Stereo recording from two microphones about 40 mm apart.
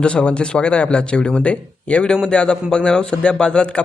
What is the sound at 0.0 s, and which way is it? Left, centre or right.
Speech, left.